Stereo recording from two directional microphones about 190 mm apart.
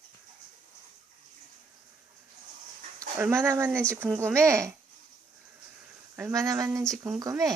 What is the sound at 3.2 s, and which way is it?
Speech, 10° right (ahead or behind).